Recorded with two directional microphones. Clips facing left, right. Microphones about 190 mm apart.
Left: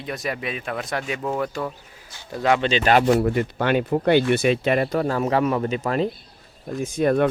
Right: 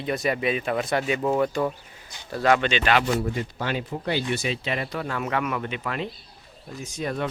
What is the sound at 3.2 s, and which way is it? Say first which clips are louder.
Speech: left 7 dB; 65° left (ahead or behind).